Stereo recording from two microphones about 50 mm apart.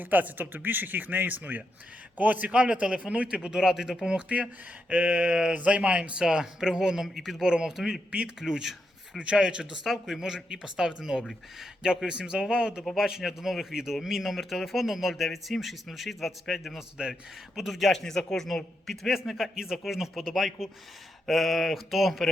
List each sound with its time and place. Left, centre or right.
0.0 s speech: right; by 7.4 s centre
7.4 s speech: centre
17.0 s speech: centre